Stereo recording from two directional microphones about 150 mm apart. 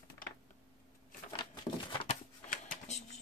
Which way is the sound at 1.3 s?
30° left (ahead or behind).